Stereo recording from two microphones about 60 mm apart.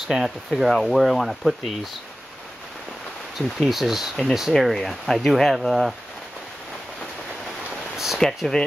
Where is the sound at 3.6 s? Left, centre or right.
Centre.